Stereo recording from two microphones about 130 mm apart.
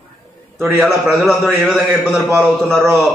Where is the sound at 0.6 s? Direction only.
Centre (ahead or behind).